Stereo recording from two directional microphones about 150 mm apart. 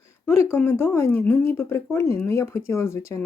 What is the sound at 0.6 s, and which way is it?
Speech, 15° left (ahead or behind).